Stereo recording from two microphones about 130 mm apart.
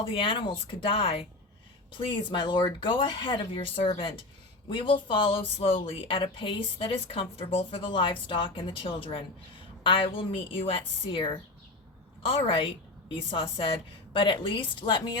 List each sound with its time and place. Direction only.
0.0 s a woman's voice: 40° left (ahead or behind)